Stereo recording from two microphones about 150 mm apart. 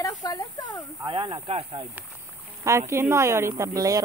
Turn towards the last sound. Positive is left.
turn(degrees=-25)  # may be behind; listen again after turning